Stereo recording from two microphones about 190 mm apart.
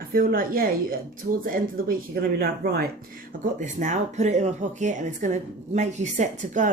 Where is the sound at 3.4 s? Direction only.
40° right (ahead or behind).